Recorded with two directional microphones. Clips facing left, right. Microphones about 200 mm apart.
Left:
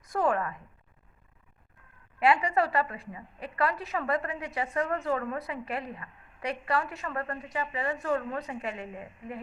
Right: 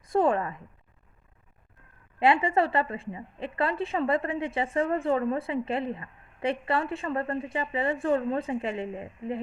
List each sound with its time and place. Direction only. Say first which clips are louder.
0.1 s a woman's voice: right 4 dB; 25° right (ahead or behind)
2.1 s a woman's voice: right 2 dB; 25° right (ahead or behind)